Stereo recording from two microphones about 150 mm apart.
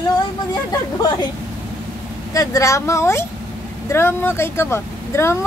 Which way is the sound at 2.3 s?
20° left (ahead or behind).